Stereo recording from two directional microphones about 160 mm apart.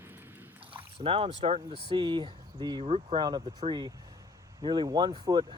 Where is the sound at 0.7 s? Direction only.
35° right (ahead or behind).